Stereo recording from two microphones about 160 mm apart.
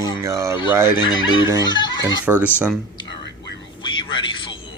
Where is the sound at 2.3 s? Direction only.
15° left (ahead or behind).